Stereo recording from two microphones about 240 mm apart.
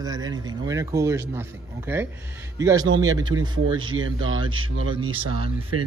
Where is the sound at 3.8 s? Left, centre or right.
Right.